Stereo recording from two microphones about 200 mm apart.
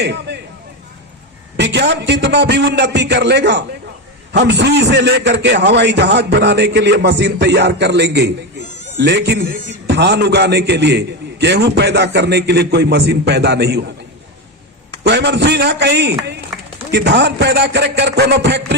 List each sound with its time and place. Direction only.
0.0 s a man's voice: 55° right (ahead or behind)
1.5 s a man's voice: 60° right (ahead or behind)
15.0 s a man's voice: 60° right (ahead or behind)